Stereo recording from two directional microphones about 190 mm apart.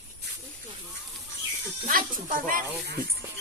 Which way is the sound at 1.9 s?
50° right (ahead or behind).